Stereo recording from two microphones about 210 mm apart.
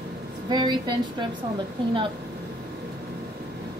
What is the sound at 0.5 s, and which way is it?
Speech, 20° right (ahead or behind).